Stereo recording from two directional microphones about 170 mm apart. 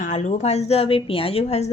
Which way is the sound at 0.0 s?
45° left (ahead or behind).